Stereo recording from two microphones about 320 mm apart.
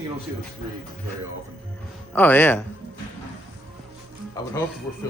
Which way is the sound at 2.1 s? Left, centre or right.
Centre.